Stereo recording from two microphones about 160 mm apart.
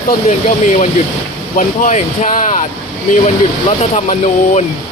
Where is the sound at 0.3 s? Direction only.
50° left (ahead or behind).